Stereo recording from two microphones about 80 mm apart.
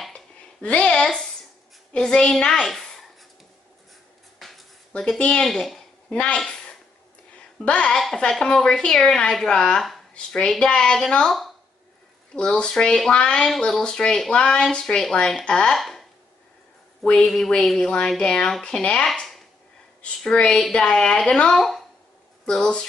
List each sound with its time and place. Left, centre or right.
0.1 s a sound: centre
2.0 s speech: centre
4.4 s a sound: centre
4.9 s speech: centre
6.0 s a woman's voice: centre
6.4 s a sound: centre
7.6 s speech: centre
12.4 s speech: centre
19.0 s speech: centre
20.0 s speech: centre